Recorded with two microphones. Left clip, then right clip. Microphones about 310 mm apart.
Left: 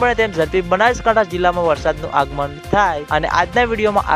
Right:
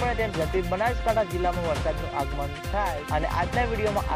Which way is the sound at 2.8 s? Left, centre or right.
Left.